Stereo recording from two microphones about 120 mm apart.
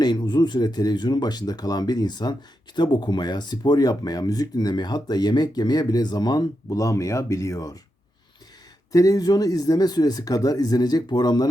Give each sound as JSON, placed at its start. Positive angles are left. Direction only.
{"t": 0.0, "sound": "speech", "side_deg": 35}
{"t": 8.9, "sound": "speech", "side_deg": 30}